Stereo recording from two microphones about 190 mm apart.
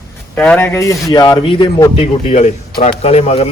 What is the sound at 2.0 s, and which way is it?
Speech, 40° left (ahead or behind).